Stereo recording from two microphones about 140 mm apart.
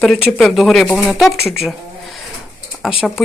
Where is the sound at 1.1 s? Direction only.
Centre (ahead or behind).